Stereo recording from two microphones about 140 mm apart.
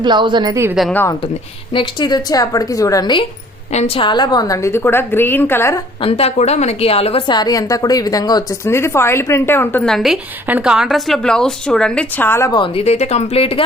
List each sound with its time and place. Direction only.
0.0 s a woman's voice: 35° right (ahead or behind)
1.2 s speech: 40° left (ahead or behind)
3.7 s a woman's voice: 50° left (ahead or behind); by 5.8 s 20° left (ahead or behind)
6.0 s a woman's voice: 45° left (ahead or behind); by 9.8 s 15° left (ahead or behind)
9.8 s a woman's voice: centre (ahead or behind)
12.5 s speech: 35° left (ahead or behind)